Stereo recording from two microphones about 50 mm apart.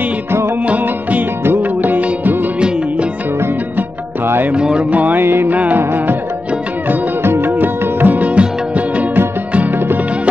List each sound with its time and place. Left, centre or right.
0.7 s music: right
4.6 s music: right
5.0 s music: right
5.5 s music: right